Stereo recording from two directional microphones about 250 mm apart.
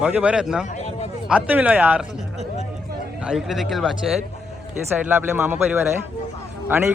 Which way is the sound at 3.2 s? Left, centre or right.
Centre.